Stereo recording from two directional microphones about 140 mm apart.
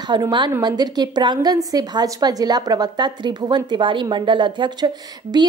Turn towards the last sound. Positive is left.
turn(degrees=-30)  # may be behind; listen again after turning